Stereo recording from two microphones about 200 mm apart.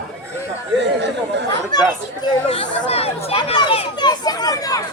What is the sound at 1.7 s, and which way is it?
Speech, 20° left (ahead or behind).